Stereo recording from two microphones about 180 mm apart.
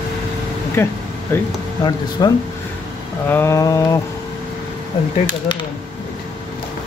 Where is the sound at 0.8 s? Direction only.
10° left (ahead or behind).